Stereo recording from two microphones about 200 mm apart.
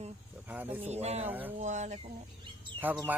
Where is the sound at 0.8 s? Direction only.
30° right (ahead or behind).